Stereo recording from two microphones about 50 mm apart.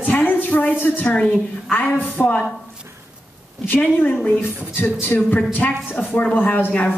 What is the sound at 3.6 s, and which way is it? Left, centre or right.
A woman's voice, left.